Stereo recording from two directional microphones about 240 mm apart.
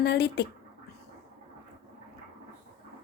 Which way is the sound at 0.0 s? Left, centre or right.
Left.